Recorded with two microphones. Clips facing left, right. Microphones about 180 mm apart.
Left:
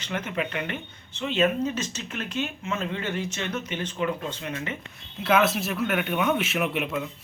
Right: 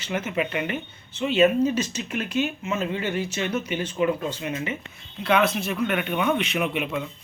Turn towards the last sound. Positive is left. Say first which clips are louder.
# right 1 dB
turn(degrees=0)  # may be behind; listen again after turning